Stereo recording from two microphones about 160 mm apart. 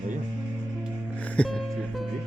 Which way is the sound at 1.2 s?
10° left (ahead or behind).